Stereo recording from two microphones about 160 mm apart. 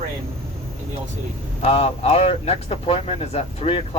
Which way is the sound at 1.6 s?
40° left (ahead or behind).